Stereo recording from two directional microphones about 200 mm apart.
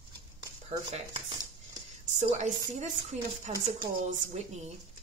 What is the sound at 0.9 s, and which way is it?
Speech, 25° right (ahead or behind).